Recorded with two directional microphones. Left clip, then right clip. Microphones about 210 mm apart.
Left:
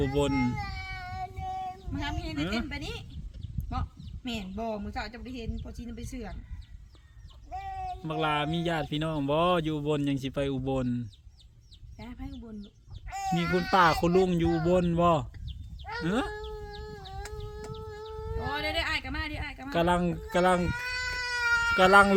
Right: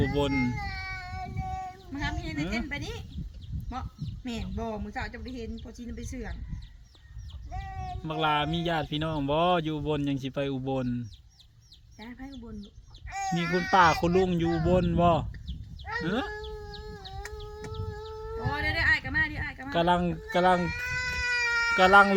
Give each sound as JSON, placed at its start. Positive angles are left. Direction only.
{"t": 0.0, "sound": "speech", "side_deg": 5}
{"t": 1.9, "sound": "speech", "side_deg": 15}
{"t": 2.6, "sound": "speech", "side_deg": 5}
{"t": 3.7, "sound": "a sound", "side_deg": 5}
{"t": 4.5, "sound": "speech", "side_deg": 5}
{"t": 7.5, "sound": "speech", "side_deg": 5}
{"t": 15.8, "sound": "chicken", "side_deg": 0}
{"t": 17.7, "sound": "speech", "side_deg": 5}